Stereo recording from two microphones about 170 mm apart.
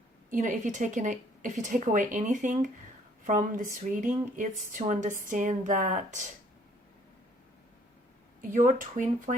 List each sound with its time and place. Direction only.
0.3 s speech: 50° right (ahead or behind)
8.4 s speech: 50° right (ahead or behind)